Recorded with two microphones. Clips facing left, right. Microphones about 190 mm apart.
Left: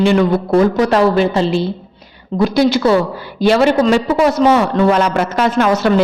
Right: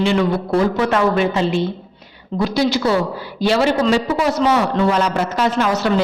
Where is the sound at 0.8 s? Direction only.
35° left (ahead or behind).